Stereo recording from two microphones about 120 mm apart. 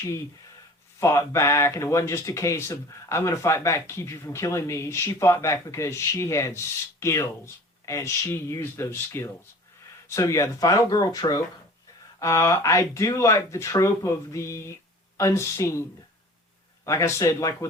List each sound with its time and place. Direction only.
0.9 s speech: 25° left (ahead or behind)
16.8 s speech: 25° left (ahead or behind)